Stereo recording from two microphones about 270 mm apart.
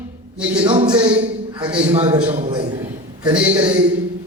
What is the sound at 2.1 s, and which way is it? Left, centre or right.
Speech, right.